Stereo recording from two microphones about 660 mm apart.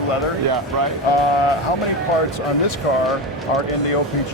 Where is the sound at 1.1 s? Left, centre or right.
Left.